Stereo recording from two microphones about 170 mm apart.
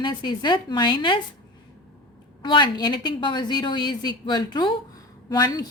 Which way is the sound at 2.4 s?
25° left (ahead or behind).